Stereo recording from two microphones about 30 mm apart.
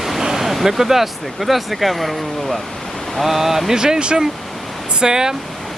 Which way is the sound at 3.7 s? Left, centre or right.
Right.